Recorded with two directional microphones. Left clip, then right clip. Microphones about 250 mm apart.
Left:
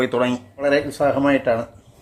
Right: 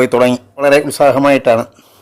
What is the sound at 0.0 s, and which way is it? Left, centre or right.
A man's voice, right.